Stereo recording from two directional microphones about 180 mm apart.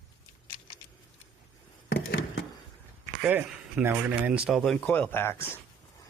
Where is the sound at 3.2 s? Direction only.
10° right (ahead or behind); by 5.6 s 10° left (ahead or behind).